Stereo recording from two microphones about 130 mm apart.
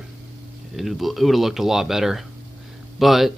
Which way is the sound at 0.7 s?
Centre (ahead or behind).